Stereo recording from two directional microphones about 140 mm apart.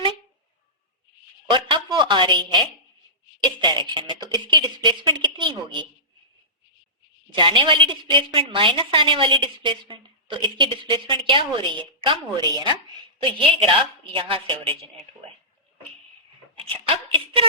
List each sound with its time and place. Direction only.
1.5 s a sound: 35° right (ahead or behind)
3.4 s a woman's voice: 35° right (ahead or behind)
7.3 s a woman's voice: 35° right (ahead or behind)
16.6 s speech: 40° right (ahead or behind)